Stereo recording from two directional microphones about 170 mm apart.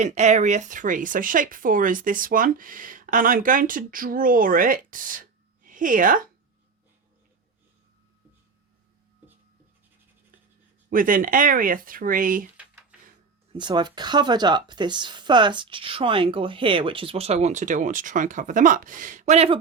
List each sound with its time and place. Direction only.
0.0 s speech: 45° right (ahead or behind)
10.8 s speech: 55° right (ahead or behind)
13.5 s speech: 25° right (ahead or behind)